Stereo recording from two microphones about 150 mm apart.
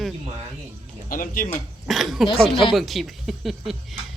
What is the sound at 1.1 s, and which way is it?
Speech, 70° left (ahead or behind).